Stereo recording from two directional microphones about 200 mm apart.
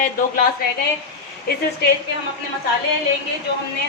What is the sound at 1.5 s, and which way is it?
Speech, 50° left (ahead or behind).